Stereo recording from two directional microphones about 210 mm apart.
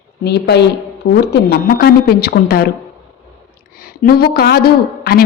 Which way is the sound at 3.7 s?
45° left (ahead or behind).